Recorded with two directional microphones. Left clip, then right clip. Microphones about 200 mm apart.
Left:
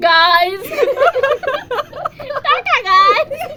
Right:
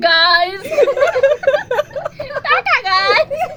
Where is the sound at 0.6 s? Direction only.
5° left (ahead or behind).